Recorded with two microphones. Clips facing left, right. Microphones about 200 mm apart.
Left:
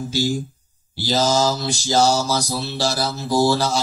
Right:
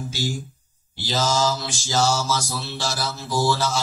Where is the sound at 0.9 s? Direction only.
40° left (ahead or behind).